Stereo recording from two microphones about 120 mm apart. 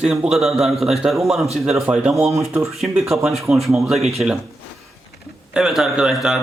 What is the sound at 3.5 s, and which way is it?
Speech, centre (ahead or behind).